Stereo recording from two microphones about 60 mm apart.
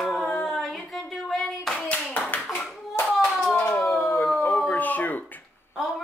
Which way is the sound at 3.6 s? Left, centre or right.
Left.